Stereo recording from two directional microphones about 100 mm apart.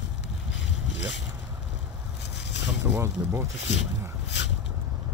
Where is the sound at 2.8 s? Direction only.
25° right (ahead or behind).